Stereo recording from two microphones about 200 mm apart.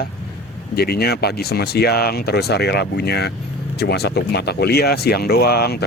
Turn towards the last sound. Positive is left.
turn(degrees=55)  # may be behind; listen again after turning